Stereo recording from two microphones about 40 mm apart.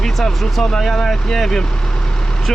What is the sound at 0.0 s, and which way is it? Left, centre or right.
Speech, centre.